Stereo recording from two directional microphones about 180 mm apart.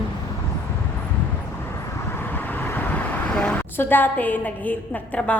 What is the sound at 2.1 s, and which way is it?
A woman's voice, 10° left (ahead or behind).